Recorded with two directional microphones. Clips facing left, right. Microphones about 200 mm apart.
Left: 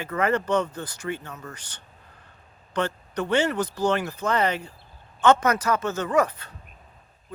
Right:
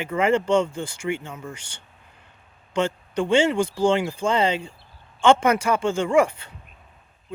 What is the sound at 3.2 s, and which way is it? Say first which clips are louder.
Speech: right 4 dB; 25° right (ahead or behind).